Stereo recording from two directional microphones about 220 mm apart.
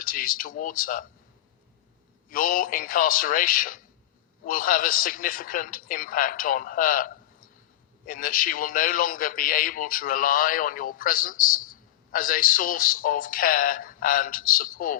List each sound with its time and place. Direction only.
0.0 s a man's voice: 40° left (ahead or behind)
2.3 s a man's voice: 40° left (ahead or behind)